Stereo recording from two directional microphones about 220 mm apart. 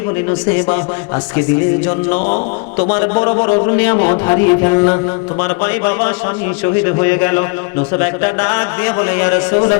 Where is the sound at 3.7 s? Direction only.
15° left (ahead or behind).